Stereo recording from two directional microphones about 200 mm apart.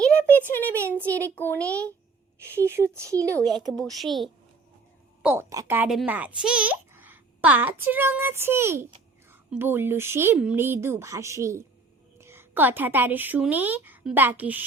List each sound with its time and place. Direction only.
0.5 s a child's voice: 10° left (ahead or behind)
2.6 s speech: 10° right (ahead or behind)
3.3 s a woman's voice: centre (ahead or behind)
5.2 s a woman's voice: 10° right (ahead or behind)